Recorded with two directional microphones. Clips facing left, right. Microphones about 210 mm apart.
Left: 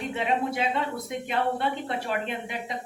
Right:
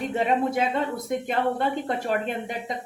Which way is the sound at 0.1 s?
45° right (ahead or behind).